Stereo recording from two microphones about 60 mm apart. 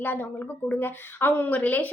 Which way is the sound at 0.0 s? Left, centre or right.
Left.